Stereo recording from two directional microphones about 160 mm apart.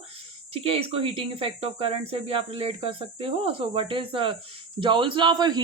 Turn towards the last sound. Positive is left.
turn(degrees=-25)  # may be behind; listen again after turning